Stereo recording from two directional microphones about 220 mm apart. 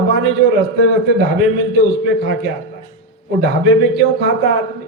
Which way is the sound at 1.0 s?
50° right (ahead or behind).